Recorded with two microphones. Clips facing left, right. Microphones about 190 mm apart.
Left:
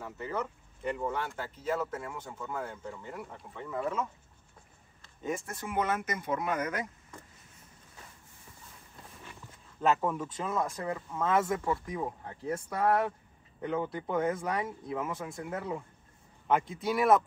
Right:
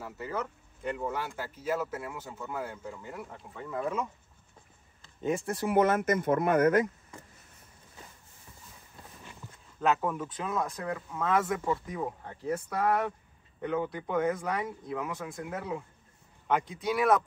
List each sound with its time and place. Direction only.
0.0 s speech: 5° right (ahead or behind)
3.8 s speech: 15° right (ahead or behind)
5.2 s speech: 30° right (ahead or behind)
5.9 s speech: 50° right (ahead or behind)
9.8 s speech: centre (ahead or behind)